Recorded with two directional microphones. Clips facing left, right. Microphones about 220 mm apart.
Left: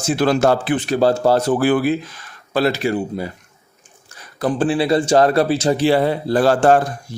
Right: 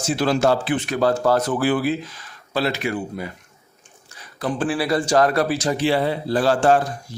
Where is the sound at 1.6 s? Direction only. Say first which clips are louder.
Left 4 dB; 50° left (ahead or behind).